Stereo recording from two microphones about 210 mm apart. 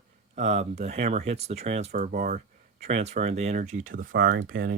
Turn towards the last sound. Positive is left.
turn(degrees=-40)  # may be behind; listen again after turning